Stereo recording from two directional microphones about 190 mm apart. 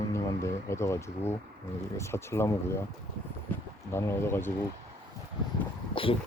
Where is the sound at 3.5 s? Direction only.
10° left (ahead or behind).